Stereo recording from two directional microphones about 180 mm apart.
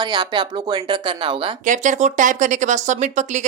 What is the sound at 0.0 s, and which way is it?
Speech, 25° right (ahead or behind).